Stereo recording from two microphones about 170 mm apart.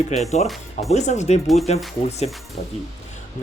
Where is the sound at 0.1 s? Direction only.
40° left (ahead or behind).